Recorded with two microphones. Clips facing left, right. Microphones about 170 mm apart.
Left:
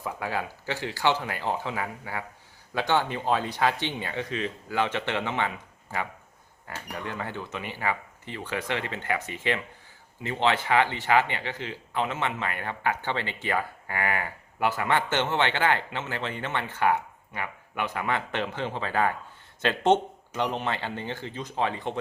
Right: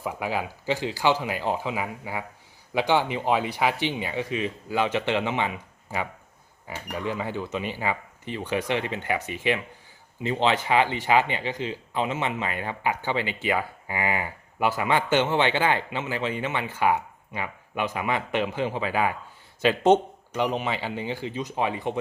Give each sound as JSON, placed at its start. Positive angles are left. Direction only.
{"t": 0.0, "sound": "speech", "side_deg": -15}
{"t": 20.3, "sound": "speech", "side_deg": -5}